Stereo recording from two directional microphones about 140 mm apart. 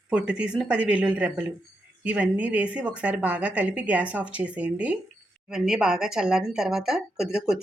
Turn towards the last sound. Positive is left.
turn(degrees=-5)  # may be behind; listen again after turning